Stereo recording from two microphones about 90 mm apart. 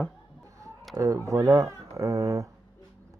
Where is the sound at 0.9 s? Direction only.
35° right (ahead or behind).